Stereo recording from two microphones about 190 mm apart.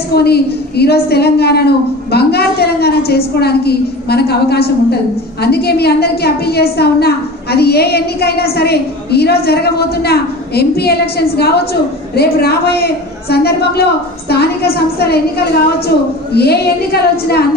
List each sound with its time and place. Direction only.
0.1 s a woman's voice: 60° left (ahead or behind)